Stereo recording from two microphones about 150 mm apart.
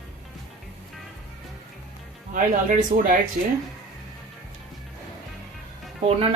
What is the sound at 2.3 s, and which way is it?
Speech, 60° right (ahead or behind).